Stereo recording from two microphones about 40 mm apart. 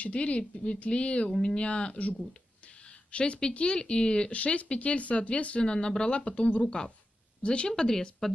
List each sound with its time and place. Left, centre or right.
0.0 s speech: left
2.9 s a sound: left
3.5 s speech: left
4.3 s speech: left
7.7 s speech: centre